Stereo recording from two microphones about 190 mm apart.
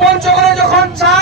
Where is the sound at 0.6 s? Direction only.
60° right (ahead or behind).